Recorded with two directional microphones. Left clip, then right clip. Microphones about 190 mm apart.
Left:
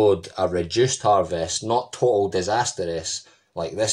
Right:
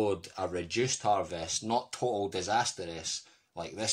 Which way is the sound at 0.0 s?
20° right (ahead or behind).